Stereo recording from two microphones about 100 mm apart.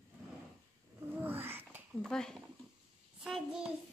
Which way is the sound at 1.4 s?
20° right (ahead or behind).